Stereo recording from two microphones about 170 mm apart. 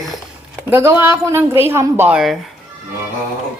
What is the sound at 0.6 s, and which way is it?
Speech, 10° right (ahead or behind).